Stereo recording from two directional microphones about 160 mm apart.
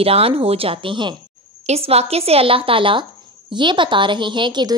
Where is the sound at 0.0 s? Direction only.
35° right (ahead or behind).